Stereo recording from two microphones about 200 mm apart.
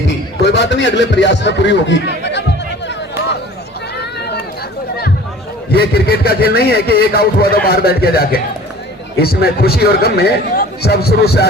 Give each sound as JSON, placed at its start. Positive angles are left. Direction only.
{"t": 0.4, "sound": "a man's voice", "side_deg": 60}
{"t": 3.9, "sound": "run", "side_deg": 55}
{"t": 5.7, "sound": "a man's voice", "side_deg": 50}